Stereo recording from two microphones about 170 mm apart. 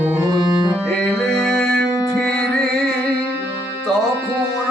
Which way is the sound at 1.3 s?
5° left (ahead or behind).